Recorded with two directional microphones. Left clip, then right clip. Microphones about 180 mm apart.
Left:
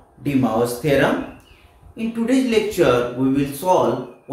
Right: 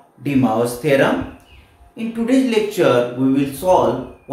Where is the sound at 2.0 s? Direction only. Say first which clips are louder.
Right 2 dB; centre (ahead or behind).